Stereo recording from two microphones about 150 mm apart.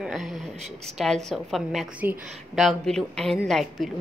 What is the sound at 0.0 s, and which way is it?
A woman's voice, centre (ahead or behind).